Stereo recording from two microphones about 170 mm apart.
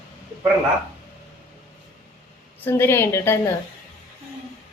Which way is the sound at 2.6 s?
15° left (ahead or behind).